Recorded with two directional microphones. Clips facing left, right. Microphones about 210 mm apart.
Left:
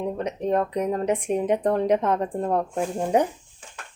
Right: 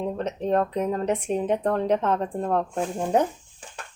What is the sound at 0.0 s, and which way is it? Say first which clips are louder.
Speech: left 1 dB; 10° left (ahead or behind).